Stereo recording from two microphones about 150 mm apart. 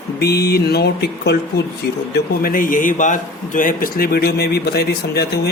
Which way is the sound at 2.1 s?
75° left (ahead or behind).